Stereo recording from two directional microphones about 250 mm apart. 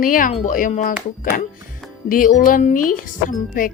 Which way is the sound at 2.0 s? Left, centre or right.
Left.